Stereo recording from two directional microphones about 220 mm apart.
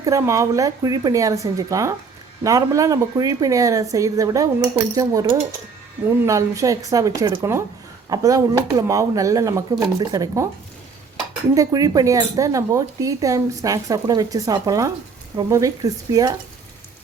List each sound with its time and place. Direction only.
0.0 s speech: 15° right (ahead or behind)
11.5 s speech: 15° right (ahead or behind)